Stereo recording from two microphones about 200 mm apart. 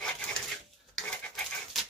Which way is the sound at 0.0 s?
5° left (ahead or behind).